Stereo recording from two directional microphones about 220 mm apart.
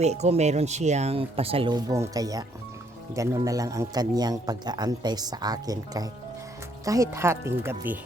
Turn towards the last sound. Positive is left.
turn(degrees=-10)  # may be behind; listen again after turning